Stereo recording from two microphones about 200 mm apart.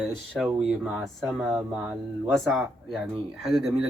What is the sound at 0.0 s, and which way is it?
Speech, centre (ahead or behind).